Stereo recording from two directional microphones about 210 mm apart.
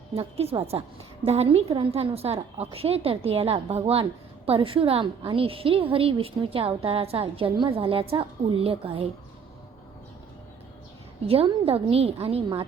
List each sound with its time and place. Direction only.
0.1 s a woman's voice: 30° right (ahead or behind)
11.3 s a woman's voice: 25° right (ahead or behind)